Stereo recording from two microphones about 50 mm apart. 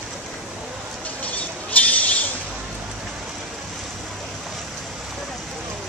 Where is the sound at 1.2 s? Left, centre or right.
Left.